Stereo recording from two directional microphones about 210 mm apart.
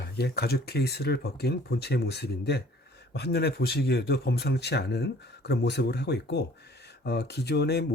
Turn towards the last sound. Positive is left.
turn(degrees=50)  # may be behind; listen again after turning